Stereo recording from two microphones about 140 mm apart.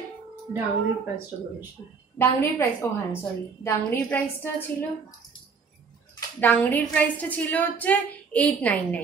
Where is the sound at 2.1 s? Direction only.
15° left (ahead or behind).